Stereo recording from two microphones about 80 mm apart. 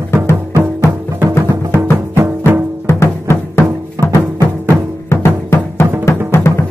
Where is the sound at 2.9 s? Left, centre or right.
Left.